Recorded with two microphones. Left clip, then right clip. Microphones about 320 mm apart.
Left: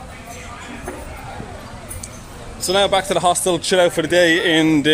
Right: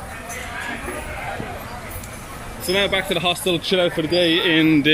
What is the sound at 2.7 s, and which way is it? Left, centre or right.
A man's voice, centre.